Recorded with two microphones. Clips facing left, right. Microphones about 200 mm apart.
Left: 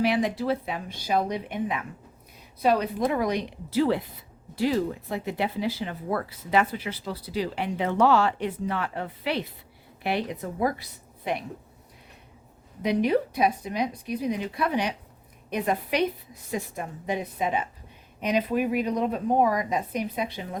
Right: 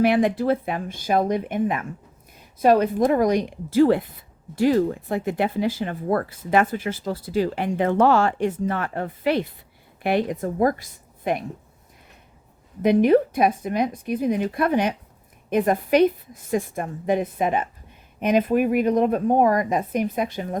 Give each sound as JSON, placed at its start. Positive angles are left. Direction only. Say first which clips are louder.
{"t": 0.0, "sound": "speech", "louder": "right 6 dB", "side_deg": -55}
{"t": 12.8, "sound": "speech", "louder": "right 7 dB", "side_deg": -50}